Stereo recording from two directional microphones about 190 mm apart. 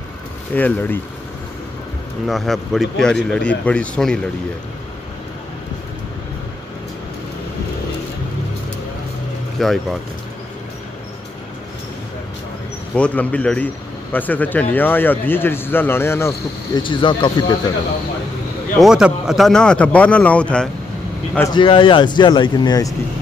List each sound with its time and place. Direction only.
0.6 s speech: 10° left (ahead or behind)
2.2 s a man's voice: centre (ahead or behind)
9.6 s a man's voice: centre (ahead or behind)
12.9 s speech: 5° left (ahead or behind)
16.8 s speech: 25° left (ahead or behind)
18.8 s a man's voice: 5° right (ahead or behind)
21.5 s speech: 25° left (ahead or behind)